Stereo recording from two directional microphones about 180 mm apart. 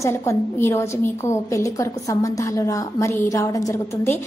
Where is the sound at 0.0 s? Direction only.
15° left (ahead or behind).